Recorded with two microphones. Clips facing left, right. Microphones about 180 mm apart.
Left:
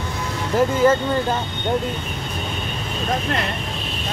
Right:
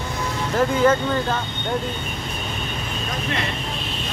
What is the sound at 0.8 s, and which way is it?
Speech, 10° left (ahead or behind).